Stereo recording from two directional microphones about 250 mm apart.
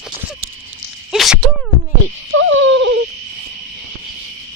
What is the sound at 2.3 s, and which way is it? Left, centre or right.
Hoot, right.